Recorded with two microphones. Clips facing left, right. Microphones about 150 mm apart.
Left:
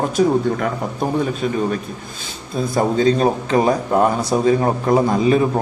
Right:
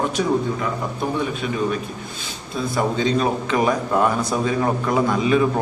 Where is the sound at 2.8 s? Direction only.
40° left (ahead or behind).